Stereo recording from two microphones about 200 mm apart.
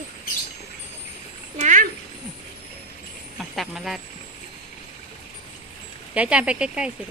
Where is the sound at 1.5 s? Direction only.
40° right (ahead or behind).